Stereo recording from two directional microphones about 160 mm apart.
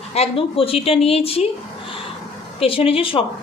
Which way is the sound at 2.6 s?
35° left (ahead or behind).